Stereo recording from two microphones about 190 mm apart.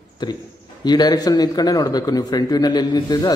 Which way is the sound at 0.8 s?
20° left (ahead or behind).